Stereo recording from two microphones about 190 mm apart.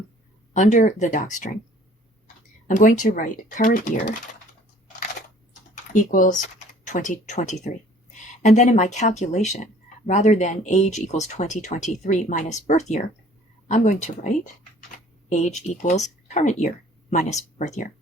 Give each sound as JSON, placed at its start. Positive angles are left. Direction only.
{"t": 0.5, "sound": "speech", "side_deg": 40}
{"t": 5.9, "sound": "speech", "side_deg": 45}